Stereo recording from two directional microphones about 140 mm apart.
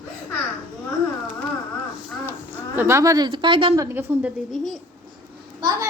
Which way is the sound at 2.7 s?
20° right (ahead or behind).